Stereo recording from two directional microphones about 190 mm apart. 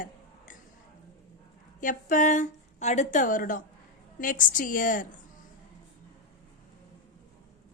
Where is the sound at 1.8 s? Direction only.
45° left (ahead or behind).